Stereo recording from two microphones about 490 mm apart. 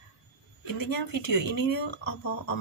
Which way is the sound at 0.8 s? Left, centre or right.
Left.